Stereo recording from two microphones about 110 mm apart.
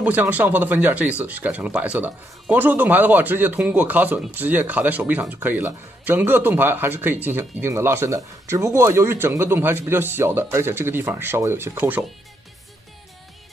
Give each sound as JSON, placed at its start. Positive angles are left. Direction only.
{"t": 0.0, "sound": "speech", "side_deg": -15}